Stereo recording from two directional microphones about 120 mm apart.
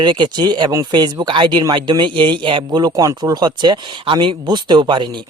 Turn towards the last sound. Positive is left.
turn(degrees=-40)  # may be behind; listen again after turning